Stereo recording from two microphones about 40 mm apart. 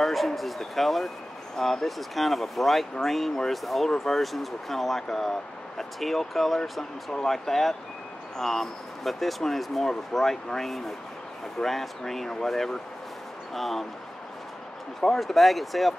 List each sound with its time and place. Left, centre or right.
0.0 s speech: centre
15.1 s speech: centre